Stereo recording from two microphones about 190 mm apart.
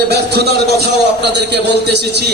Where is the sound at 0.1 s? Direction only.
60° right (ahead or behind).